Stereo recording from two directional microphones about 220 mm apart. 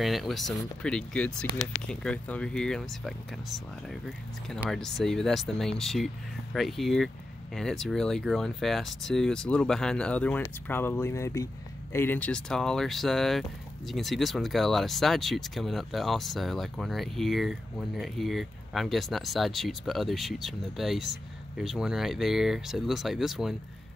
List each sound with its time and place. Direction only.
0.0 s speech: centre (ahead or behind)